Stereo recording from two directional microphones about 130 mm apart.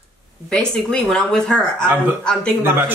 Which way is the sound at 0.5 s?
5° left (ahead or behind).